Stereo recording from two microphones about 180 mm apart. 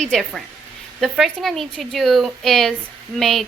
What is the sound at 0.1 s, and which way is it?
A woman's voice, centre (ahead or behind).